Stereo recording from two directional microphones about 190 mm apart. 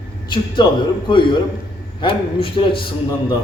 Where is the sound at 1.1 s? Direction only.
25° left (ahead or behind).